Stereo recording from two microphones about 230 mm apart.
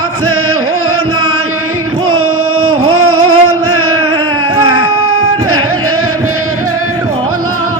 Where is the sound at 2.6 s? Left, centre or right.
Right.